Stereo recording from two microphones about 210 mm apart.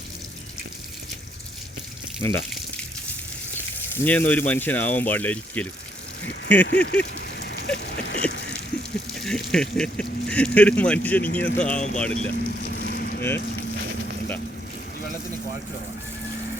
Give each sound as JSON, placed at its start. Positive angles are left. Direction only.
{"t": 3.9, "sound": "speech", "side_deg": 10}
{"t": 6.6, "sound": "a sound", "side_deg": 55}
{"t": 9.2, "sound": "speech", "side_deg": 5}
{"t": 11.2, "sound": "speech", "side_deg": 45}
{"t": 11.6, "sound": "speech", "side_deg": 5}
{"t": 12.3, "sound": "vehicle", "side_deg": 50}